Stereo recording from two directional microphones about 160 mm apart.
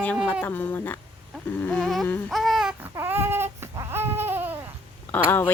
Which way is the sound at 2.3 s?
Centre (ahead or behind).